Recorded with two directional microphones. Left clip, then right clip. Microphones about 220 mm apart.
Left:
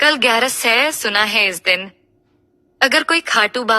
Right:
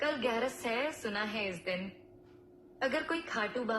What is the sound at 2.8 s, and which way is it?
Speech, 50° left (ahead or behind).